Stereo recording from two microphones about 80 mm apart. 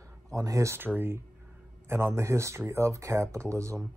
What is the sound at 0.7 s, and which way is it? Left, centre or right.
Speech, right.